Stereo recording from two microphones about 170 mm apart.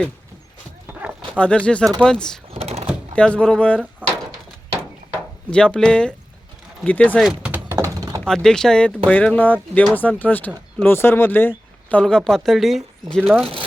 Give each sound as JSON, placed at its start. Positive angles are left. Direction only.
{"t": 0.9, "sound": "a sound", "side_deg": -10}
{"t": 1.4, "sound": "speech", "side_deg": 5}
{"t": 2.5, "sound": "a sound", "side_deg": -35}
{"t": 3.2, "sound": "speech", "side_deg": 5}
{"t": 5.5, "sound": "speech", "side_deg": 5}
{"t": 7.3, "sound": "thunk", "side_deg": -10}
{"t": 8.2, "sound": "speech", "side_deg": 5}